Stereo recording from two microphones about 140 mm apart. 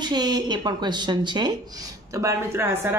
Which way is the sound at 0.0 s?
30° right (ahead or behind).